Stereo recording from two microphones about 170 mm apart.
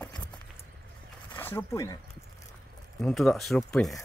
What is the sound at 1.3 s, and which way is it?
Speech, 10° left (ahead or behind).